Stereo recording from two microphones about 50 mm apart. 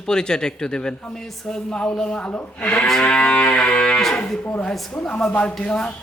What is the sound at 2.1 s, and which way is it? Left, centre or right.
Speech, left.